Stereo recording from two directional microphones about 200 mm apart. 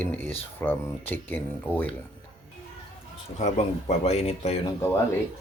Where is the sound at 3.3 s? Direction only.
35° left (ahead or behind).